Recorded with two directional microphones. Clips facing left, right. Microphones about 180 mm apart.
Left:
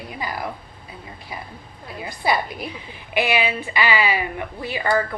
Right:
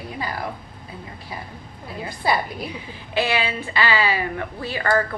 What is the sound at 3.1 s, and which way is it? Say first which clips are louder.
Speech: left 1 dB; 15° left (ahead or behind).